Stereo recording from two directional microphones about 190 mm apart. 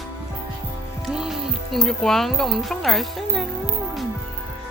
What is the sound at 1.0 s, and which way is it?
Speech, 5° right (ahead or behind).